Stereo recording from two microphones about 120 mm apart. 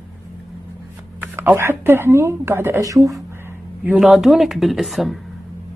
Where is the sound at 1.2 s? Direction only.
15° right (ahead or behind).